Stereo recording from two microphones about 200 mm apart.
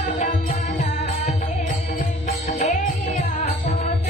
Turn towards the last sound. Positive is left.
turn(degrees=35)  # may be behind; listen again after turning